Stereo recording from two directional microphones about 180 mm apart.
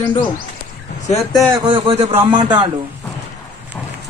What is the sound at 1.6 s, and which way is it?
Speech, 30° right (ahead or behind).